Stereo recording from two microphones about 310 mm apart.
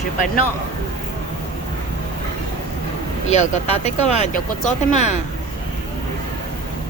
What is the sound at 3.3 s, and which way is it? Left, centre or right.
Speech, left.